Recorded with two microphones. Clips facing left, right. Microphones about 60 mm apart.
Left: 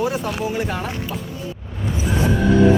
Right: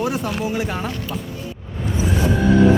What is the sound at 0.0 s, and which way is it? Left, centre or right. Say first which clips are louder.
Speech: even; centre.